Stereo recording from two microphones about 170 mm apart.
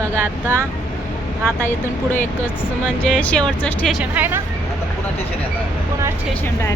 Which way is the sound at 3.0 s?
10° left (ahead or behind).